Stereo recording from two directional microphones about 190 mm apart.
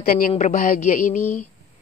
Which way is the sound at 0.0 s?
50° left (ahead or behind).